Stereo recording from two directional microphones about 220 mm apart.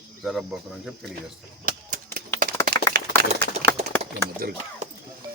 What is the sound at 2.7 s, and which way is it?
Clapping, 40° right (ahead or behind).